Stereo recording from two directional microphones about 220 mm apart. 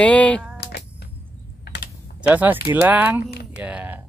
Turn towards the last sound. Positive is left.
turn(degrees=-5)  # may be behind; listen again after turning